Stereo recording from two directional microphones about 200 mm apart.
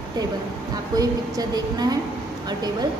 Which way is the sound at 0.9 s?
20° right (ahead or behind).